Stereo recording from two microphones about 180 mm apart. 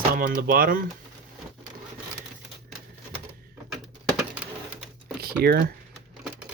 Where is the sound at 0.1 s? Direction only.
55° right (ahead or behind).